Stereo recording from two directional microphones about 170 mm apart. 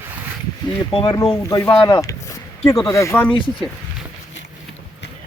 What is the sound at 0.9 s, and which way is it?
Speech, 25° left (ahead or behind).